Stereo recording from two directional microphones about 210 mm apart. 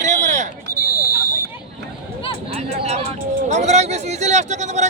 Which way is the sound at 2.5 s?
30° right (ahead or behind).